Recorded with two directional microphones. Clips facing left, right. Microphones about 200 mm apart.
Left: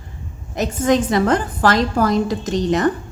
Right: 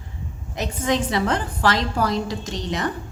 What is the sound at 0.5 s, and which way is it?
A woman's voice, 45° left (ahead or behind).